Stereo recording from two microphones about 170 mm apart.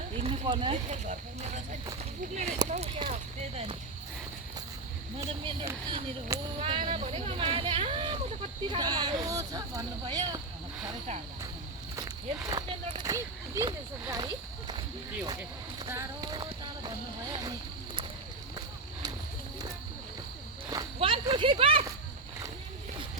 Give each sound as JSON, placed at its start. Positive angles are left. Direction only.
{"t": 0.1, "sound": "speech", "side_deg": -40}
{"t": 5.4, "sound": "speech", "side_deg": -30}
{"t": 6.6, "sound": "speech", "side_deg": -30}
{"t": 11.9, "sound": "walk", "side_deg": -20}
{"t": 13.1, "sound": "speech", "side_deg": -20}
{"t": 15.9, "sound": "clip-clop", "side_deg": -20}
{"t": 21.0, "sound": "a sound", "side_deg": -30}